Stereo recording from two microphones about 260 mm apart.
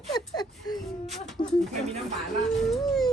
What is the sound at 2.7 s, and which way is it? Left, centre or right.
Speech, centre.